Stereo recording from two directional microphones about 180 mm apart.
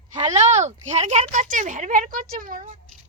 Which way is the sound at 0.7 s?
40° right (ahead or behind).